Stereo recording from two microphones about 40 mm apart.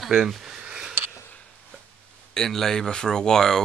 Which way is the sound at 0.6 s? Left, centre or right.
Right.